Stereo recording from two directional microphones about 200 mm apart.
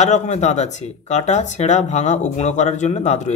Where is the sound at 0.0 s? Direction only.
35° left (ahead or behind).